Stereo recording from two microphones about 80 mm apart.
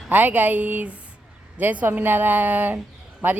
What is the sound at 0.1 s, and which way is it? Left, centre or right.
Speech, right.